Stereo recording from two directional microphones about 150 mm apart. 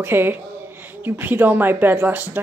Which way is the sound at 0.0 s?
15° right (ahead or behind).